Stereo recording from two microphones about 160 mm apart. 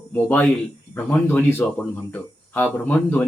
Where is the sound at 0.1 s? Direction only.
10° left (ahead or behind).